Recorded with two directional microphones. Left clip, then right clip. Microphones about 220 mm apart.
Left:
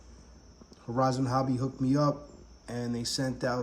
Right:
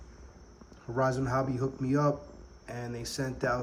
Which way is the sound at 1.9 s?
35° left (ahead or behind).